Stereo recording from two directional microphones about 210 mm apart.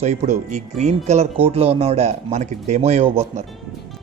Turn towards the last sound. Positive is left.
turn(degrees=-30)  # may be behind; listen again after turning